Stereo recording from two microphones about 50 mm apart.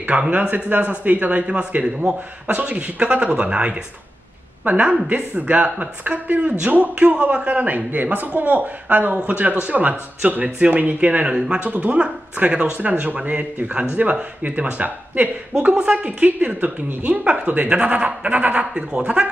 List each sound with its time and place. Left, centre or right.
0.0 s a man's voice: right